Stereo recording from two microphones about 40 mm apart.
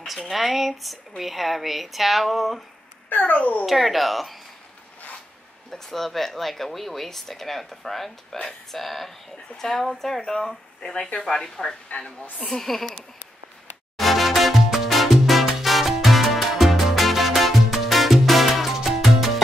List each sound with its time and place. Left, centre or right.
0.3 s speech: centre
3.1 s speech: left
3.6 s speech: centre
5.7 s speech: centre
10.8 s speech: left; by 12.8 s centre
13.9 s music: centre